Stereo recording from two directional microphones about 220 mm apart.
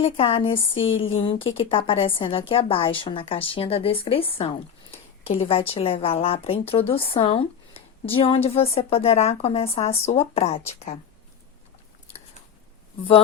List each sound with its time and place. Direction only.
0.0 s speech: 25° left (ahead or behind)